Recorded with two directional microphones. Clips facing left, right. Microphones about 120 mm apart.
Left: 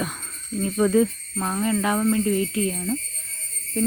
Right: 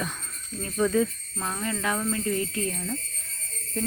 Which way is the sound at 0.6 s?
25° left (ahead or behind).